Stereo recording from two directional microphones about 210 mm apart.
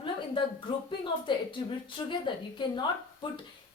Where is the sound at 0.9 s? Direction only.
25° left (ahead or behind).